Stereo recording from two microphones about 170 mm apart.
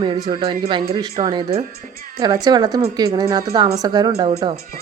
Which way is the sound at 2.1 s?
20° right (ahead or behind).